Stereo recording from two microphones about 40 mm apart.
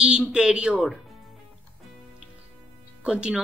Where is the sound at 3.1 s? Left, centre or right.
Right.